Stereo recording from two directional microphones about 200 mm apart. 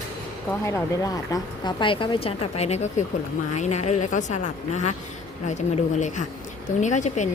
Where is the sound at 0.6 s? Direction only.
15° left (ahead or behind).